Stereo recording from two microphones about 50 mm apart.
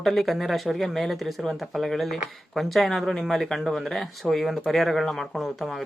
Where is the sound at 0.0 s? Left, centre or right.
Centre.